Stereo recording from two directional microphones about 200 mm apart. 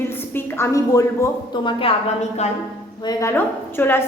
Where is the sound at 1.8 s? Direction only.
35° left (ahead or behind).